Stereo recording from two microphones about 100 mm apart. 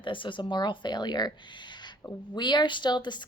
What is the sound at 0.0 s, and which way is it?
A woman's voice, 55° left (ahead or behind).